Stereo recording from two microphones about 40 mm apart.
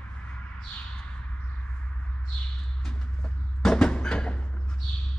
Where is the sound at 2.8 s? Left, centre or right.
Centre.